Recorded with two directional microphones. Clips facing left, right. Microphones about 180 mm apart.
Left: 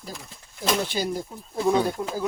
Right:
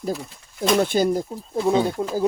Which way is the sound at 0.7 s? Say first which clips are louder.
Right 8 dB; 50° right (ahead or behind).